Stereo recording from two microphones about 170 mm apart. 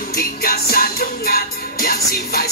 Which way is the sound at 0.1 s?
65° left (ahead or behind).